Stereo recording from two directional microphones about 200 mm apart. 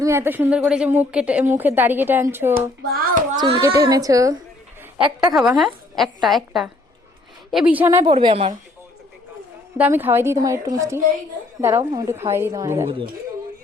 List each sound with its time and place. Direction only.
0.0 s speech: 15° right (ahead or behind)
2.6 s speech: 45° right (ahead or behind)
3.3 s speech: 20° right (ahead or behind)
5.3 s a woman's voice: centre (ahead or behind)
8.0 s a woman's voice: 25° right (ahead or behind)
9.7 s speech: 10° right (ahead or behind)